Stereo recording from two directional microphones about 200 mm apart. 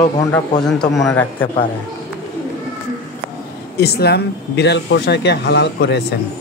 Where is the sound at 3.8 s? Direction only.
55° left (ahead or behind).